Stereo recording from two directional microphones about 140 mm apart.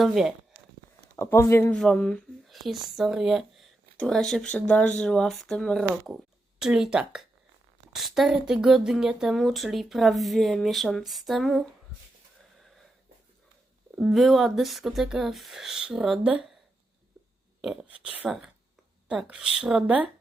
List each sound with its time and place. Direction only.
0.0 s speech: centre (ahead or behind)
1.1 s speech: 20° left (ahead or behind)
1.7 s speech: 5° left (ahead or behind)
14.0 s speech: centre (ahead or behind)
17.6 s speech: 5° right (ahead or behind)